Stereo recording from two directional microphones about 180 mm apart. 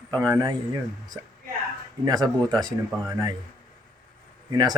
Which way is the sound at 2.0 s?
20° right (ahead or behind).